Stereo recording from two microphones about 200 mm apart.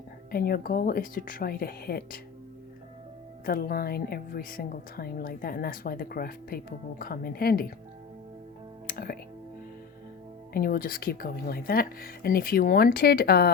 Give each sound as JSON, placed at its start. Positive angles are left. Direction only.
{"t": 0.3, "sound": "a woman's voice", "side_deg": 50}
{"t": 3.4, "sound": "a woman's voice", "side_deg": 50}
{"t": 8.9, "sound": "speech", "side_deg": 45}
{"t": 10.5, "sound": "a woman's voice", "side_deg": 45}